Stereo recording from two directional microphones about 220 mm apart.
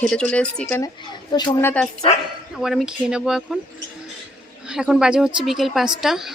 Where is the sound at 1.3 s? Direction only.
20° left (ahead or behind).